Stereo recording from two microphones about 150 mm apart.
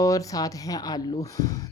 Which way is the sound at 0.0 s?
20° left (ahead or behind).